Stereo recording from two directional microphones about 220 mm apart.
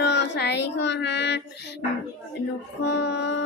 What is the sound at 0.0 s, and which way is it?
Child singing, 50° left (ahead or behind).